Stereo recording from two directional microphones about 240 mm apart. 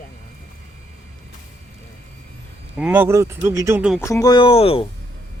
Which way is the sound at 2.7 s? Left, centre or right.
Centre.